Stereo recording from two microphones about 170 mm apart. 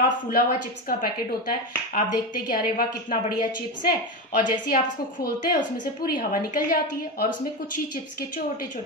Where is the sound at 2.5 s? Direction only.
55° left (ahead or behind).